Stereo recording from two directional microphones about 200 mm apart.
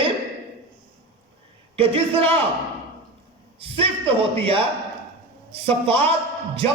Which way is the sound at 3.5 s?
30° right (ahead or behind).